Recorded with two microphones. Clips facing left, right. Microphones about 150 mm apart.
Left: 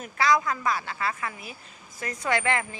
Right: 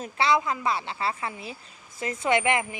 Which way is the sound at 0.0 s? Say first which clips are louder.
Even; 25° right (ahead or behind).